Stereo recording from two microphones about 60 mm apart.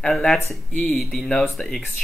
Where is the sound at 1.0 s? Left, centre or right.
Centre.